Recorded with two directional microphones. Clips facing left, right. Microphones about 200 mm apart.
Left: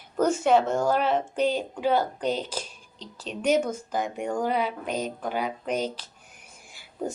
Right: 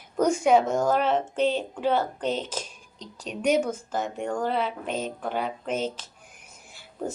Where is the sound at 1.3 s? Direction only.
10° left (ahead or behind).